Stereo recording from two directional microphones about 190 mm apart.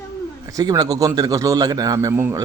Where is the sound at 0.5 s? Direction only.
20° right (ahead or behind).